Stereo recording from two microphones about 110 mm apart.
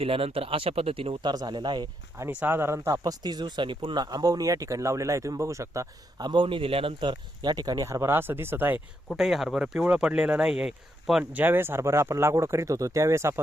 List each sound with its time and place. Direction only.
0.0 s speech: 60° right (ahead or behind)
1.2 s speech: 40° right (ahead or behind)
2.3 s speech: 15° right (ahead or behind); by 4.0 s 50° right (ahead or behind)
4.0 s speech: 35° right (ahead or behind)
6.2 s speech: 45° right (ahead or behind); by 8.8 s 20° right (ahead or behind)
9.1 s speech: centre (ahead or behind); by 13.4 s 25° right (ahead or behind)